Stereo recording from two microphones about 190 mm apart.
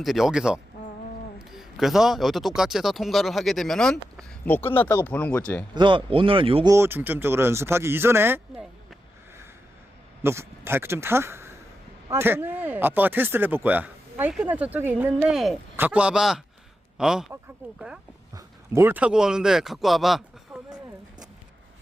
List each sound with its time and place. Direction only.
0.0 s speech: centre (ahead or behind)
5.7 s speech: 25° right (ahead or behind)
6.7 s speech: 15° right (ahead or behind)
10.2 s speech: 15° right (ahead or behind)